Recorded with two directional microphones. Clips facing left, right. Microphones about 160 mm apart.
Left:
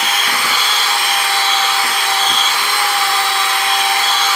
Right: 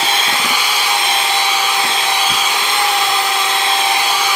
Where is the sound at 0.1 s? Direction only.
25° right (ahead or behind).